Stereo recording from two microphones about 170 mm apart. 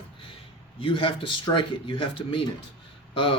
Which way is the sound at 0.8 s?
30° left (ahead or behind).